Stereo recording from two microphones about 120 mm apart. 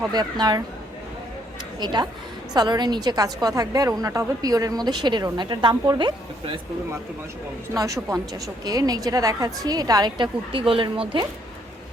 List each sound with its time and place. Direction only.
0.1 s a woman's voice: 35° right (ahead or behind)
1.8 s a woman's voice: 35° right (ahead or behind)
7.7 s a woman's voice: 30° right (ahead or behind)
10.5 s speech: 45° right (ahead or behind)